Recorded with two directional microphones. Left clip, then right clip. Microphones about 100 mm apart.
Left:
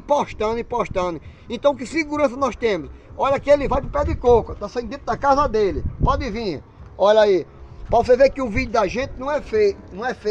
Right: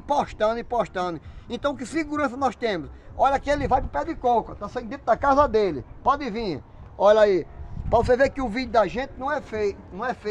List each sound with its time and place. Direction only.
0.2 s speech: 30° right (ahead or behind)
4.6 s speech: 60° right (ahead or behind); by 5.8 s 90° right
6.0 s a man's voice: 55° right (ahead or behind)
7.9 s speech: 40° right (ahead or behind)
8.4 s speech: 20° right (ahead or behind)
9.7 s speech: 45° right (ahead or behind)